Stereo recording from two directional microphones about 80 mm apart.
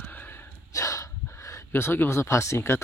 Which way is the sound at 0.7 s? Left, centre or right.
Left.